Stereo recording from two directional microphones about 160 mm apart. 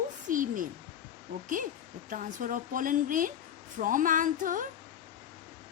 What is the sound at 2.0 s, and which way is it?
Speech, 55° right (ahead or behind).